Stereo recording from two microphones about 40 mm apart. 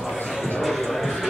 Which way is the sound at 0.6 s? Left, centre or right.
Centre.